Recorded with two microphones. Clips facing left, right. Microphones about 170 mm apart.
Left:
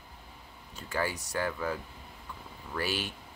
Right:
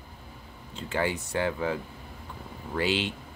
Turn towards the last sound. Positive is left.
turn(degrees=-20)  # may be behind; listen again after turning